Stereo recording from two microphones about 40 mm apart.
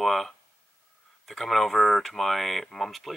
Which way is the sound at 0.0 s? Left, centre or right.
Centre.